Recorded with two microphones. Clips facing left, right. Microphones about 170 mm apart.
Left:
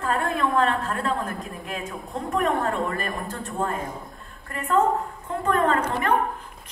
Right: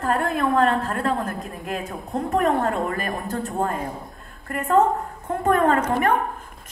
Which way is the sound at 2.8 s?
45° right (ahead or behind).